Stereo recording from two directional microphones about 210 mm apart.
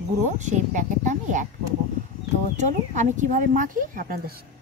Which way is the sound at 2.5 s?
35° right (ahead or behind).